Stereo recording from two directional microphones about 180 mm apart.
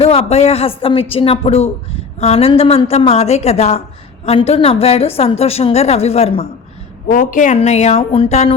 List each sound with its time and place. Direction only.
0.0 s a woman's voice: 35° left (ahead or behind)
7.1 s a woman's voice: 50° left (ahead or behind)